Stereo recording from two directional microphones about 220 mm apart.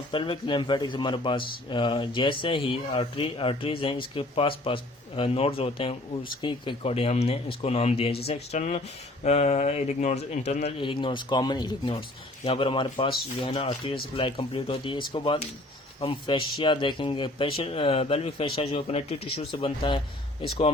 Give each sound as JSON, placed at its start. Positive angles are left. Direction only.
{"t": 0.1, "sound": "speech", "side_deg": 20}